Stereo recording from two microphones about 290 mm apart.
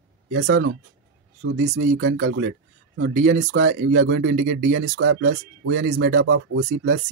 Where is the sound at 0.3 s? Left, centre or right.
Right.